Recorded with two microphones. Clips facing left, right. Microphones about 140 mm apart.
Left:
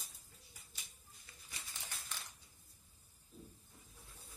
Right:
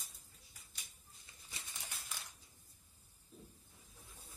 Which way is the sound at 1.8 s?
10° right (ahead or behind).